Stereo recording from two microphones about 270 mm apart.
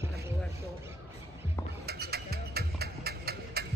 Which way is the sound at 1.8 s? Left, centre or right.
Right.